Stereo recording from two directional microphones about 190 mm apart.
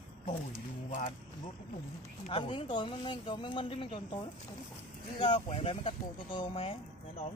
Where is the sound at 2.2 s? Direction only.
30° left (ahead or behind).